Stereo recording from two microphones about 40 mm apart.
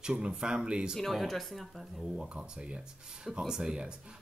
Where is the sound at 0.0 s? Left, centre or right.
Right.